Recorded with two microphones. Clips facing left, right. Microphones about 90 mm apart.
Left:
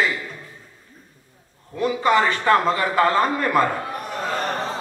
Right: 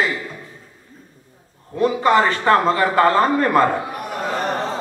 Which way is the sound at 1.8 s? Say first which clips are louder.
Right 3 dB; 40° right (ahead or behind).